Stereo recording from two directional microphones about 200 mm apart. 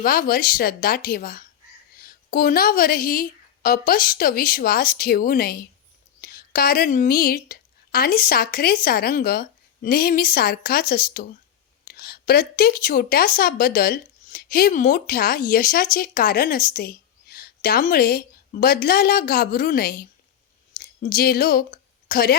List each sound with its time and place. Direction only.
0.0 s a woman's voice: 45° left (ahead or behind)